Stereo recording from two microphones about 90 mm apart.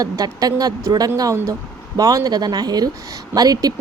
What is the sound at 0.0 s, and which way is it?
A woman's voice, 45° right (ahead or behind).